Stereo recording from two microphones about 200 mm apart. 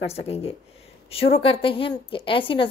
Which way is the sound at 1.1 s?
30° left (ahead or behind).